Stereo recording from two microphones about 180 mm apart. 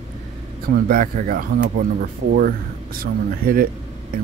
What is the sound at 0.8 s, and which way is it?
Speech, 50° right (ahead or behind).